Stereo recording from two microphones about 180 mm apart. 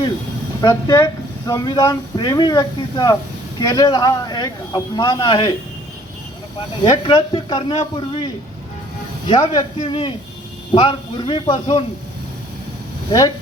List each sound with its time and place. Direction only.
0.6 s speech: 15° left (ahead or behind)
6.8 s speech: 25° left (ahead or behind)
13.1 s speech: 20° left (ahead or behind)